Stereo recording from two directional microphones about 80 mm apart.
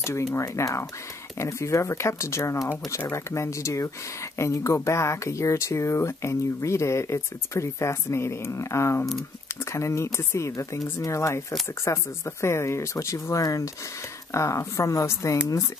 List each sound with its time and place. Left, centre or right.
0.0 s speech: left